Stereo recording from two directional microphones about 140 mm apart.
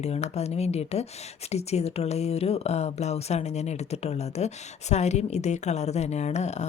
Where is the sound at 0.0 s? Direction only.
50° left (ahead or behind).